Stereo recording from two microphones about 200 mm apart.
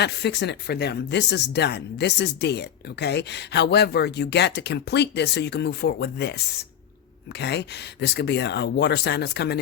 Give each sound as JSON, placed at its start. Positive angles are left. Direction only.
{"t": 0.0, "sound": "speech", "side_deg": 60}